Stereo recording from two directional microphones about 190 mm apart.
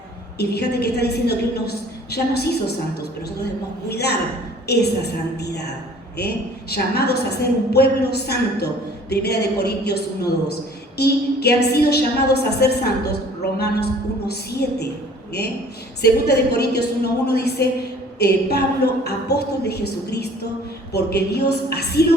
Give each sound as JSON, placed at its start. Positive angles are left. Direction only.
{"t": 0.3, "sound": "a woman's voice", "side_deg": 60}
{"t": 3.8, "sound": "a woman's voice", "side_deg": 60}
{"t": 16.0, "sound": "a woman's voice", "side_deg": 60}